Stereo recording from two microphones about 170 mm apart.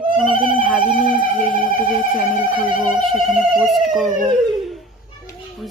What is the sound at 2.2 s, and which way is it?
Speech, 5° right (ahead or behind).